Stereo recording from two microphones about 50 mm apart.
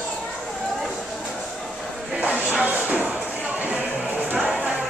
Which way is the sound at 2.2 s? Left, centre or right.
Right.